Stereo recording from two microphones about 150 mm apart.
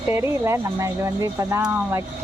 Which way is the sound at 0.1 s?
15° right (ahead or behind).